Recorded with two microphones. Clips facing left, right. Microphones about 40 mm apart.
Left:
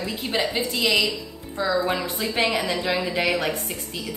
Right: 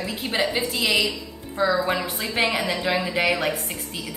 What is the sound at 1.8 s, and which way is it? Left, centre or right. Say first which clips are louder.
Speech: even; centre.